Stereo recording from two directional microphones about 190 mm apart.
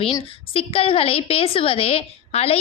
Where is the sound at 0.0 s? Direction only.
30° left (ahead or behind).